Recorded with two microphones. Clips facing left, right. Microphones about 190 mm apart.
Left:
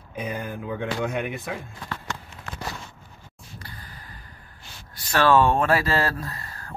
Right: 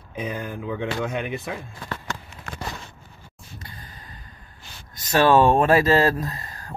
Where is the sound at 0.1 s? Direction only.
5° left (ahead or behind).